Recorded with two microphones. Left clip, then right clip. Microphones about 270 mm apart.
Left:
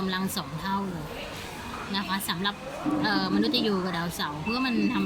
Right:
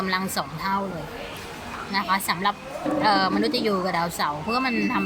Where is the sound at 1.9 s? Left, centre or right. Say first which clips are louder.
Right 7 dB; centre.